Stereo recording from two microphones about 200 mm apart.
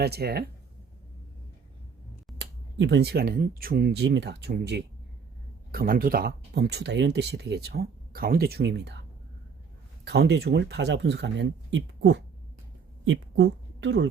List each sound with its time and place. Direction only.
0.0 s speech: 50° right (ahead or behind)
2.4 s a woman's voice: 60° right (ahead or behind)